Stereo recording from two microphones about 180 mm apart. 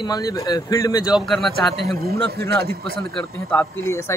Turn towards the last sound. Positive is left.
turn(degrees=15)  # may be behind; listen again after turning